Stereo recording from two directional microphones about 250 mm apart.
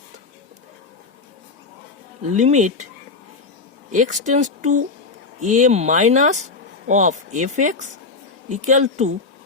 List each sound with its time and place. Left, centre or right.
2.3 s speech: right
3.9 s speech: right